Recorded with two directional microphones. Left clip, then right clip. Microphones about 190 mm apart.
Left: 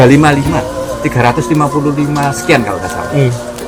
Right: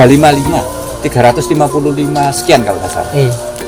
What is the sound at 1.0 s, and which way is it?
Speech, 55° right (ahead or behind).